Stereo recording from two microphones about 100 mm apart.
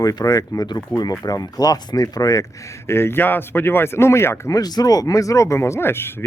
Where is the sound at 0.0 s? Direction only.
40° left (ahead or behind).